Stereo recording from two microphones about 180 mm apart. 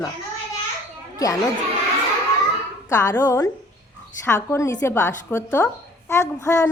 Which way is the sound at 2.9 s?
20° left (ahead or behind).